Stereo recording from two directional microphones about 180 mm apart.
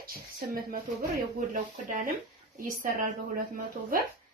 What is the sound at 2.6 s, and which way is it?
Speech, 50° right (ahead or behind).